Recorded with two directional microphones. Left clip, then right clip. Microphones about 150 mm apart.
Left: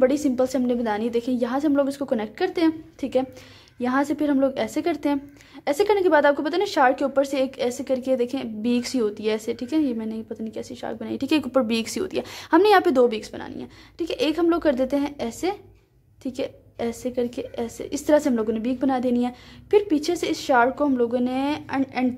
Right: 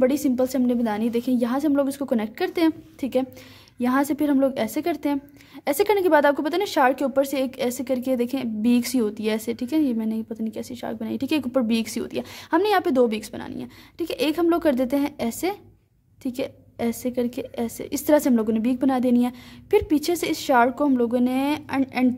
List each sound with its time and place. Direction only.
0.0 s a woman's voice: 45° right (ahead or behind)